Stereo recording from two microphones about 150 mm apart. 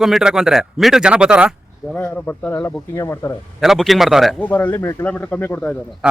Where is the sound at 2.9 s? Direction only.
20° left (ahead or behind).